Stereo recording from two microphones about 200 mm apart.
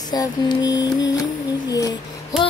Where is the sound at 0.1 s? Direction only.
20° left (ahead or behind).